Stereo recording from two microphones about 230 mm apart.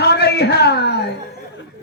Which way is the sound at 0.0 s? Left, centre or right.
Left.